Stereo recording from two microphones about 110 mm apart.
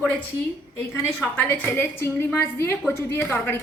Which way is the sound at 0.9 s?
20° left (ahead or behind).